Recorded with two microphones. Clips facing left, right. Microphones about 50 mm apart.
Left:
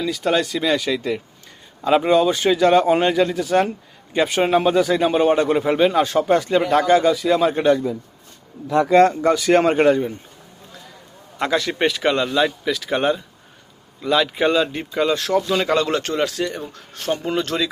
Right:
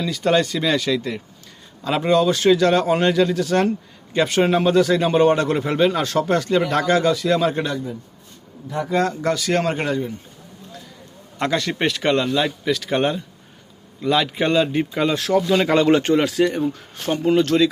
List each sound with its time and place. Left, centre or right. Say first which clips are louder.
0.0 s a man's voice: right 1 dB; centre
8.7 s a man's voice: left 8 dB; left
9.2 s a man's voice: left 5 dB; centre
11.3 s a man's voice: left 1 dB; centre